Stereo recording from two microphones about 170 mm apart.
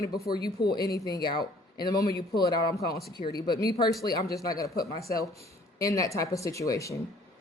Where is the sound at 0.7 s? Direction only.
20° left (ahead or behind).